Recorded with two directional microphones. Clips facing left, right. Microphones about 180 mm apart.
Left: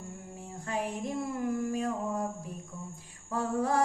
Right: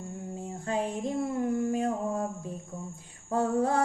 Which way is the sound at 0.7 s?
25° right (ahead or behind).